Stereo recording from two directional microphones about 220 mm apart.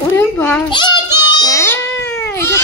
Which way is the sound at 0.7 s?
20° left (ahead or behind).